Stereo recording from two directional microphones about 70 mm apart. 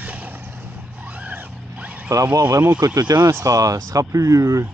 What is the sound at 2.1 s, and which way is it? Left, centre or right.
Speech, right.